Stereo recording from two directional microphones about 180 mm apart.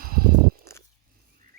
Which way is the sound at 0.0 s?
55° right (ahead or behind).